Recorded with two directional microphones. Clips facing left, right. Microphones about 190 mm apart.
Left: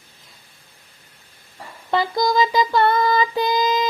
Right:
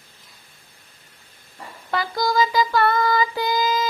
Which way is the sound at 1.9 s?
20° left (ahead or behind).